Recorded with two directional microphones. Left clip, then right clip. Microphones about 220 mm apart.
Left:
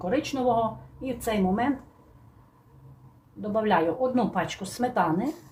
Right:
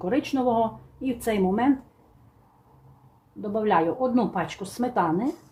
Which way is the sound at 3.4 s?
25° right (ahead or behind).